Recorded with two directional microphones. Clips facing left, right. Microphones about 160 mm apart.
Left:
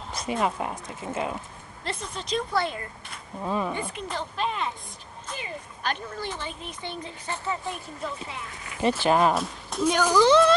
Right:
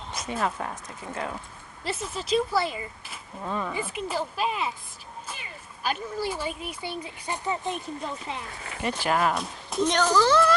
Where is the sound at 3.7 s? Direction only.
5° right (ahead or behind).